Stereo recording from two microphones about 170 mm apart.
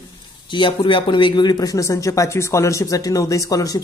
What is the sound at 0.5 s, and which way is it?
Speech, 30° left (ahead or behind).